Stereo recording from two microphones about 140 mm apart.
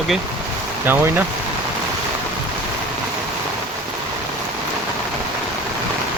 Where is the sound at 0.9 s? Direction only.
15° right (ahead or behind).